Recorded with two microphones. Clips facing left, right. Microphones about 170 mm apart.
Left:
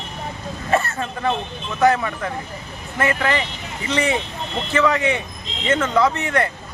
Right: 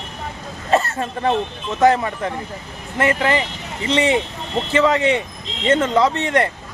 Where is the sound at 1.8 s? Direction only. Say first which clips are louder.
Right 2 dB; 30° right (ahead or behind).